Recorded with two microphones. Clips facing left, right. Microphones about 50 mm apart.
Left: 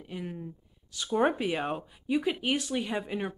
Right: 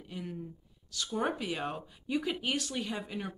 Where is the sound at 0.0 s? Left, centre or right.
Left.